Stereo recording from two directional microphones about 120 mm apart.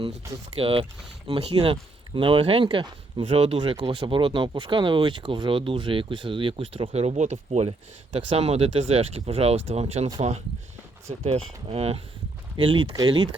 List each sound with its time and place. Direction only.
0.6 s speech: 50° right (ahead or behind)
3.3 s speech: 60° right (ahead or behind)
3.6 s speech: 45° right (ahead or behind); by 7.6 s 75° right (ahead or behind)
8.3 s speech: 60° right (ahead or behind)
12.5 s speech: 45° right (ahead or behind)